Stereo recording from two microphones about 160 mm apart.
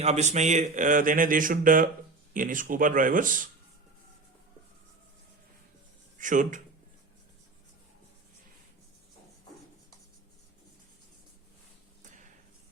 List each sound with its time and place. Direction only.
0.0 s speech: 45° right (ahead or behind)
6.1 s speech: 55° right (ahead or behind)
12.0 s a sound: 50° right (ahead or behind)